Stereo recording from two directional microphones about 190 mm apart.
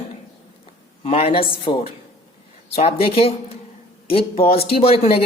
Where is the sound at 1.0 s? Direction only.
30° left (ahead or behind).